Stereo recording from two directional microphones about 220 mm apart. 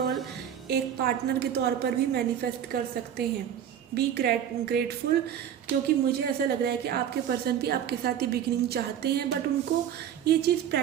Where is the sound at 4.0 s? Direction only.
45° right (ahead or behind).